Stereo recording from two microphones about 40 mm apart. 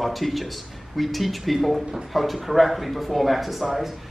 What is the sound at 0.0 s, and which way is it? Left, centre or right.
Speech, centre.